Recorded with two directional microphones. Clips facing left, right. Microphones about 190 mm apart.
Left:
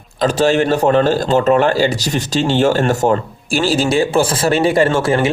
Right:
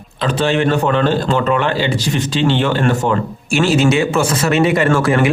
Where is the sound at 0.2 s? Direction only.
40° left (ahead or behind).